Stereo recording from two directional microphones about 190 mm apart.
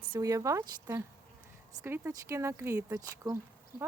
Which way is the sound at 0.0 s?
20° right (ahead or behind).